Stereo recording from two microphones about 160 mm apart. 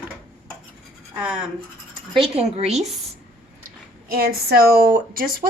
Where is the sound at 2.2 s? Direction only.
40° right (ahead or behind).